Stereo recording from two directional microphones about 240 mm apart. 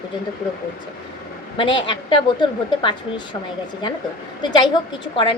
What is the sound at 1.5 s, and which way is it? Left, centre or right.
A woman's voice, centre.